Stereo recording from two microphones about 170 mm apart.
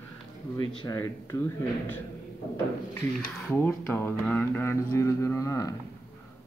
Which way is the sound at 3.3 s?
10° left (ahead or behind).